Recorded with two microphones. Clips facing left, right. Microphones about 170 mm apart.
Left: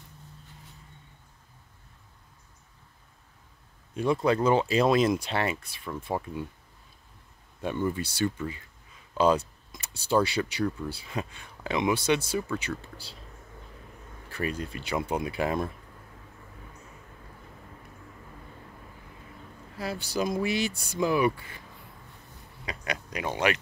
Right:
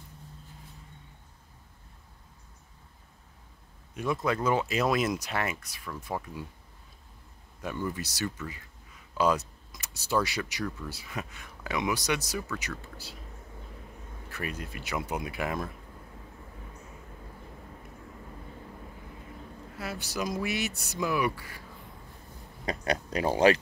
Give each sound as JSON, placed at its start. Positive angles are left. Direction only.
{"t": 3.9, "sound": "speech", "side_deg": 30}
{"t": 7.6, "sound": "speech", "side_deg": 25}
{"t": 14.3, "sound": "speech", "side_deg": 30}
{"t": 19.8, "sound": "speech", "side_deg": 30}
{"t": 22.7, "sound": "speech", "side_deg": -35}